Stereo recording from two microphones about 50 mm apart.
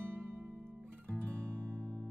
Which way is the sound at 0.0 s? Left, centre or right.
Right.